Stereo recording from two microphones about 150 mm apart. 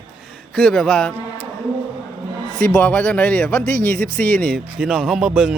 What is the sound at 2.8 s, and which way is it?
A man's voice, 10° left (ahead or behind).